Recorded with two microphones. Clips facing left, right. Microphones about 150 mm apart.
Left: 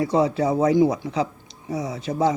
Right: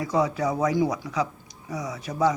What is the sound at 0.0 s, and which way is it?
Speech, 30° left (ahead or behind).